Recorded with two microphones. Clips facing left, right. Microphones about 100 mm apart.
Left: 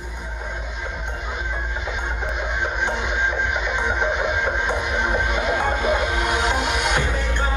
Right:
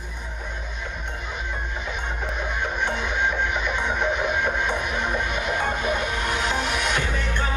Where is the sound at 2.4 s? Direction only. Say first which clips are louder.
Left 2 dB; 20° left (ahead or behind).